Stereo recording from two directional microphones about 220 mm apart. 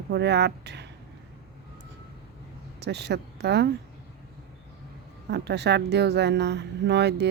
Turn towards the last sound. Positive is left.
turn(degrees=-50)  # may be behind; listen again after turning